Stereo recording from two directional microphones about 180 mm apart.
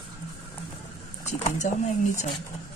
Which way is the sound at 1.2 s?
40° left (ahead or behind).